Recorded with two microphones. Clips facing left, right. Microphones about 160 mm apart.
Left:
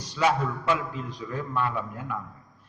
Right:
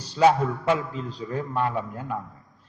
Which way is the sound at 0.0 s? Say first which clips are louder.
Right 5 dB; 30° right (ahead or behind).